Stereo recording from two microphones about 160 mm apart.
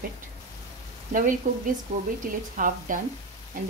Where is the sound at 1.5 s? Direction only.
55° right (ahead or behind).